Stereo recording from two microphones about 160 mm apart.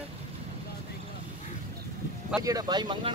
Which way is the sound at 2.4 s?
25° right (ahead or behind).